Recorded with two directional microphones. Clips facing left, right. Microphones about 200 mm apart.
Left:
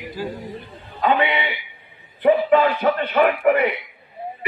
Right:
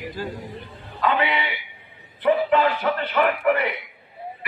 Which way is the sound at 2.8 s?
40° left (ahead or behind).